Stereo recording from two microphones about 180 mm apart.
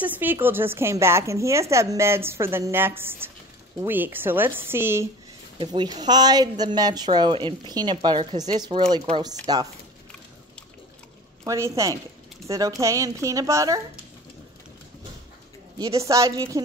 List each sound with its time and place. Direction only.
0.0 s a woman's voice: 10° right (ahead or behind)
5.6 s a woman's voice: 25° right (ahead or behind)
11.4 s a woman's voice: 15° right (ahead or behind)
15.8 s a woman's voice: 15° right (ahead or behind)